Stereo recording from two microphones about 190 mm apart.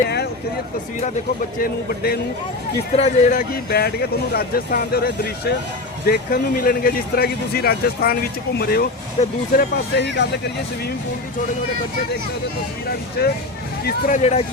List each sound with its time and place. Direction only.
1.6 s speech: 50° left (ahead or behind)
2.9 s speech: 40° left (ahead or behind); by 8.9 s 55° left (ahead or behind)
9.2 s speech: 30° left (ahead or behind)
9.6 s speech: 60° left (ahead or behind)
13.2 s speech: 55° left (ahead or behind)
14.2 s speech: 35° left (ahead or behind)